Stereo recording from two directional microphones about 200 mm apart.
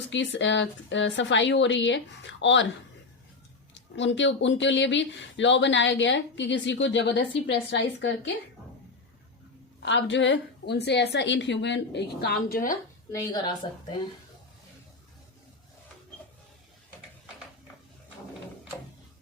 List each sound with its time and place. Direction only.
0.1 s speech: 65° left (ahead or behind)
3.8 s speech: 65° left (ahead or behind)
9.8 s speech: 60° left (ahead or behind); by 12.7 s 45° left (ahead or behind)
13.1 s a woman's voice: 20° left (ahead or behind)